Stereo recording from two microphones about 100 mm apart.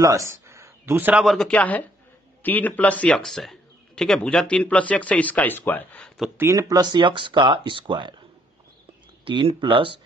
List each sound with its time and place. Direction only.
0.0 s speech: 30° right (ahead or behind)
1.2 s a man's voice: centre (ahead or behind)
1.5 s speech: 15° left (ahead or behind)
6.0 s a sound: centre (ahead or behind)
6.5 s speech: 45° right (ahead or behind)
9.2 s speech: 60° right (ahead or behind)